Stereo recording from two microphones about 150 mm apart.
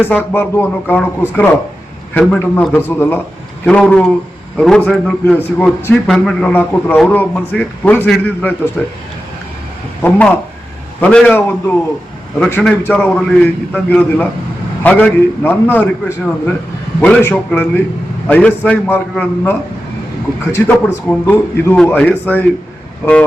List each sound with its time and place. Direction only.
0.0 s a man's voice: 15° left (ahead or behind)
2.1 s a man's voice: 10° left (ahead or behind)
10.0 s a man's voice: 10° left (ahead or behind)
20.7 s a man's voice: 10° left (ahead or behind)